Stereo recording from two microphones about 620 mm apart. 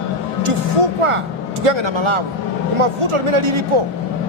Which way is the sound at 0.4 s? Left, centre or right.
Right.